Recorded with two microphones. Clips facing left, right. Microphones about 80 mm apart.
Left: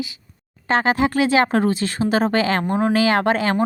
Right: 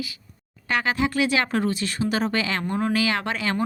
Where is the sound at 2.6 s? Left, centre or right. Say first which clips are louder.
Left 5 dB; left.